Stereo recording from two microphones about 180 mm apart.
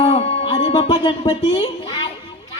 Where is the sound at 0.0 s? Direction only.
35° left (ahead or behind).